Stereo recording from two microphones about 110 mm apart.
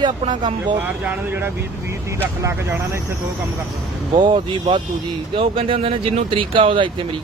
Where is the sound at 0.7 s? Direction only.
15° right (ahead or behind).